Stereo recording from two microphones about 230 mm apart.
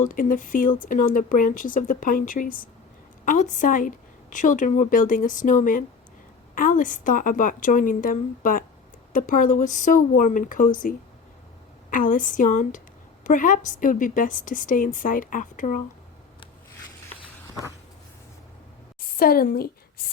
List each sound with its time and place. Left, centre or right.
0.0 s a woman's voice: left
19.1 s a woman's voice: left